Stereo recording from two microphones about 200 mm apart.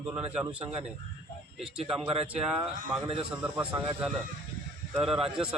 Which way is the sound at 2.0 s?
30° right (ahead or behind).